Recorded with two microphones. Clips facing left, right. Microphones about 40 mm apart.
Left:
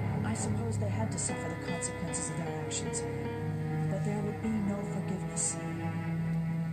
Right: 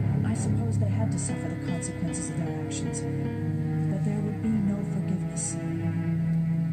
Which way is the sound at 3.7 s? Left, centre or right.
Centre.